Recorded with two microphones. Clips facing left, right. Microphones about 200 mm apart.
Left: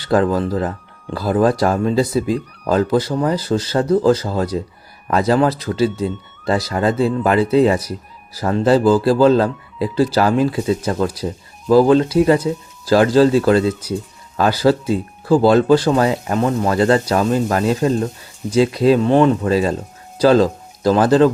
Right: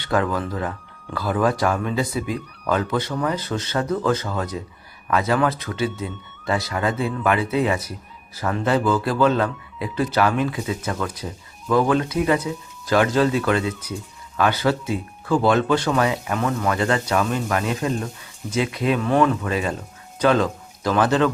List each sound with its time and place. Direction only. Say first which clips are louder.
0.0 s speech: left 6 dB; 35° left (ahead or behind)